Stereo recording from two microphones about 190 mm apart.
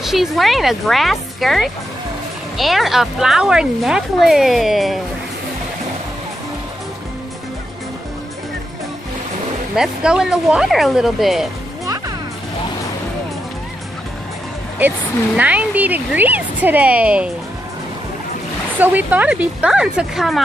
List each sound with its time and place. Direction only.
0.0 s speech: centre (ahead or behind)
9.8 s speech: 5° right (ahead or behind)
15.3 s speech: 5° right (ahead or behind)
18.8 s speech: 10° right (ahead or behind)